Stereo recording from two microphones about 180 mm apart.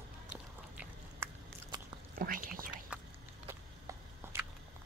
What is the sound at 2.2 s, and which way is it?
Whispering, 50° right (ahead or behind).